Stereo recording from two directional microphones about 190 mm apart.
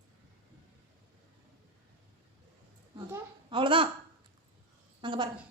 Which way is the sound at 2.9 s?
25° right (ahead or behind).